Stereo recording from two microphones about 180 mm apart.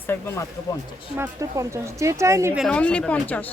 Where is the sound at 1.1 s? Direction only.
15° right (ahead or behind).